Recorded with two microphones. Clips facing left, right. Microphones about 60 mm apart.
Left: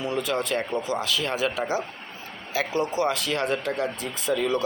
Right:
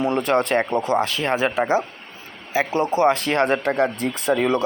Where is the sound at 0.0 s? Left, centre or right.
Right.